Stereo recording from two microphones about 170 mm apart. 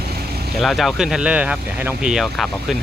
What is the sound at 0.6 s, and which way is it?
Speech, centre (ahead or behind).